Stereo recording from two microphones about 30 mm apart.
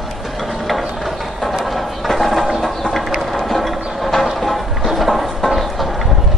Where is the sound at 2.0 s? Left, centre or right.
Centre.